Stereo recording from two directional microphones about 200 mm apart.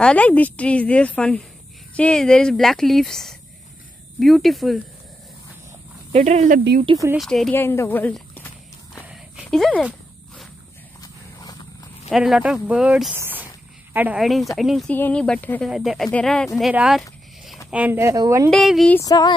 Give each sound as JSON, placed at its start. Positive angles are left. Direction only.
{"t": 0.0, "sound": "speech", "side_deg": 5}
{"t": 6.1, "sound": "speech", "side_deg": -35}
{"t": 7.2, "sound": "walk", "side_deg": 0}
{"t": 9.0, "sound": "a sound", "side_deg": -5}
{"t": 11.0, "sound": "horse", "side_deg": 20}
{"t": 12.1, "sound": "speech", "side_deg": 0}
{"t": 18.5, "sound": "speech", "side_deg": 0}
{"t": 18.9, "sound": "female singing", "side_deg": 20}